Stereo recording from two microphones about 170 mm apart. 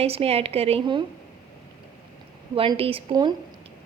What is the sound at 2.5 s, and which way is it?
Speech, 30° right (ahead or behind).